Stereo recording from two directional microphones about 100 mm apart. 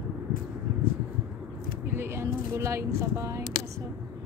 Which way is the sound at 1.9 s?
25° right (ahead or behind).